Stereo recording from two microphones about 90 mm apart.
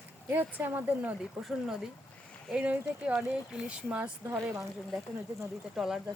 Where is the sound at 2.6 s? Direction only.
15° right (ahead or behind).